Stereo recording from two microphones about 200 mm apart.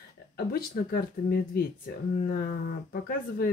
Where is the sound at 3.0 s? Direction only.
50° left (ahead or behind).